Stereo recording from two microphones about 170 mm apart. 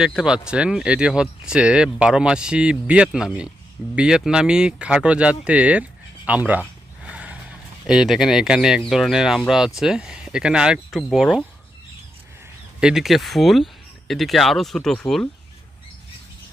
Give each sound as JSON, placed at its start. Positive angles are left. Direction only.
{"t": 0.0, "sound": "speech", "side_deg": 0}
{"t": 7.0, "sound": "a sound", "side_deg": -5}
{"t": 7.9, "sound": "speech", "side_deg": 0}
{"t": 12.8, "sound": "speech", "side_deg": 0}